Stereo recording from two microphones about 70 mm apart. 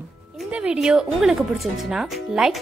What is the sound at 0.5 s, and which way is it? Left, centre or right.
Speech, centre.